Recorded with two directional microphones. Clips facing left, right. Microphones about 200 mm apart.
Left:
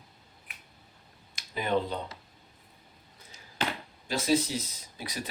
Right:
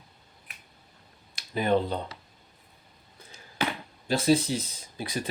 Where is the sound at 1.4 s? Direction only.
40° right (ahead or behind).